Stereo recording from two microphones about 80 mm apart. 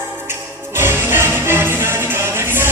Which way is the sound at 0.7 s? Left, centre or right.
Right.